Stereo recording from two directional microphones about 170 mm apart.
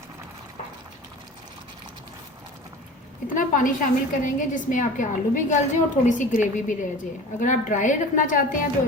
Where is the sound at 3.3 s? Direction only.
50° left (ahead or behind).